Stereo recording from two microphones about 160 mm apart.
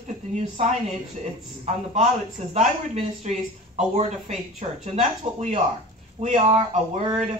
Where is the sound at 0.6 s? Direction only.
40° right (ahead or behind).